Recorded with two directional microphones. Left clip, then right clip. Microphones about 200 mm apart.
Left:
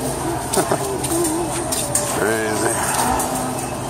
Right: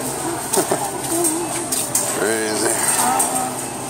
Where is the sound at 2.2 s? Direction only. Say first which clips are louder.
Even; 15° right (ahead or behind).